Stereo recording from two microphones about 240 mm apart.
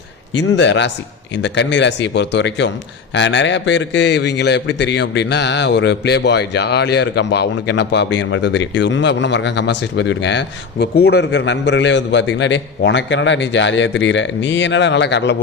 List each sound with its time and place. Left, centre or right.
0.3 s a man's voice: left